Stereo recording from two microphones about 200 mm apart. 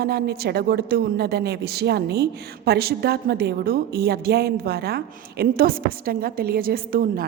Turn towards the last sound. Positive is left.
turn(degrees=-45)  # may be behind; listen again after turning